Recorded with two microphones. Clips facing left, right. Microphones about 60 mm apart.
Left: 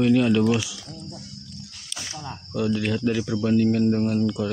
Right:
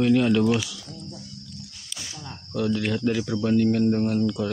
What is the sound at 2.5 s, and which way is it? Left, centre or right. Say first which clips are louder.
Speech: left 1 dB; centre.